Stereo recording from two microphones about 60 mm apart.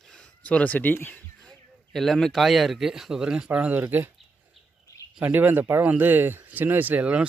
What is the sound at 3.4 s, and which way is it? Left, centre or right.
Speech, right.